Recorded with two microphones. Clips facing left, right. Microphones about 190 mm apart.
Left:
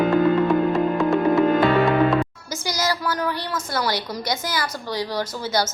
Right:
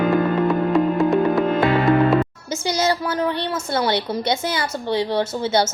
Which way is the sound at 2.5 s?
25° right (ahead or behind).